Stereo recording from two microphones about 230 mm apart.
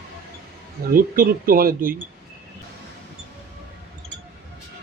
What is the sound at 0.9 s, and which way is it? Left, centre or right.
Speech, right.